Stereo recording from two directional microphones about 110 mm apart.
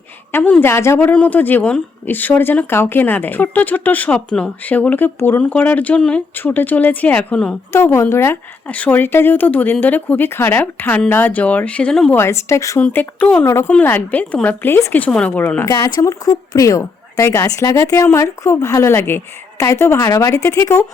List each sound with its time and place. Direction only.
0.3 s a woman's voice: 20° left (ahead or behind)
0.9 s speech: 15° left (ahead or behind)
7.7 s speech: 25° left (ahead or behind); by 12.1 s 5° left (ahead or behind)
12.1 s a woman's voice: 25° left (ahead or behind)
12.8 s a woman's voice: 15° left (ahead or behind)
15.0 s speech: 10° left (ahead or behind)
15.6 s a woman's voice: 30° left (ahead or behind)